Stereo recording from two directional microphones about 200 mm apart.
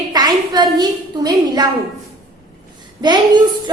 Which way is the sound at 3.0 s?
20° right (ahead or behind).